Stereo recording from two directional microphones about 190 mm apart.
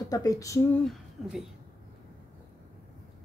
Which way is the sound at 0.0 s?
20° left (ahead or behind).